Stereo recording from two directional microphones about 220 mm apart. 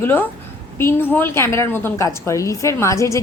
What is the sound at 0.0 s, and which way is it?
A woman's voice, 10° left (ahead or behind).